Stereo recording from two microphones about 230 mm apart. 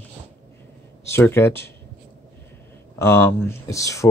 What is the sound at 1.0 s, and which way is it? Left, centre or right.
Speech, centre.